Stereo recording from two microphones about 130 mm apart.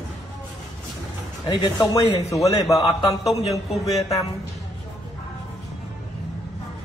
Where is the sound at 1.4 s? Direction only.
35° left (ahead or behind).